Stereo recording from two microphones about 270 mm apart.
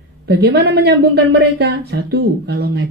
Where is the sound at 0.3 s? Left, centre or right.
Right.